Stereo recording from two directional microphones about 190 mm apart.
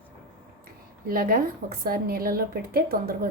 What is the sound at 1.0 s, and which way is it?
A woman's voice, 50° right (ahead or behind).